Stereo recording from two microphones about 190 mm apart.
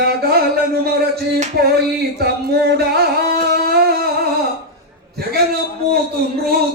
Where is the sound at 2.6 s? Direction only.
55° right (ahead or behind).